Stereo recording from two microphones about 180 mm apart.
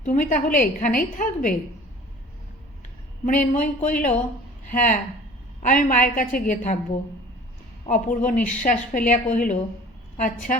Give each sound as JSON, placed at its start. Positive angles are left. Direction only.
{"t": 0.0, "sound": "a woman's voice", "side_deg": 45}
{"t": 3.2, "sound": "a woman's voice", "side_deg": 45}
{"t": 7.9, "sound": "a woman's voice", "side_deg": 50}